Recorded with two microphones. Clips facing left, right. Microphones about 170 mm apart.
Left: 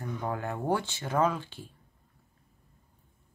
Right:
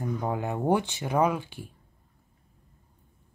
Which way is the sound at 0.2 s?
15° right (ahead or behind).